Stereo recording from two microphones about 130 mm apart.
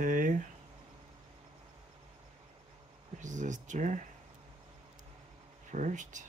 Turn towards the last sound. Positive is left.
turn(degrees=-75)  # may be behind; listen again after turning